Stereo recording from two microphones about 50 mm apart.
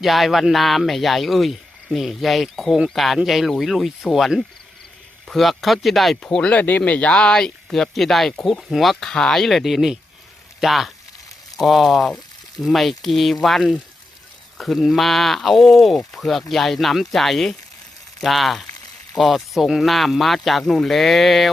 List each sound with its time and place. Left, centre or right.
0.0 s speech: centre
6.5 s speech: left; by 21.5 s centre